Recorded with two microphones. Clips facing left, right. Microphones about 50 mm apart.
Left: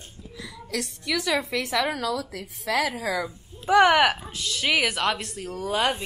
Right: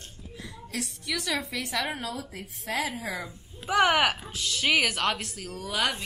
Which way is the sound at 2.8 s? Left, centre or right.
Left.